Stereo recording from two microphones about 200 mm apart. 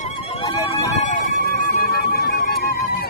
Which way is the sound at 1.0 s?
40° left (ahead or behind).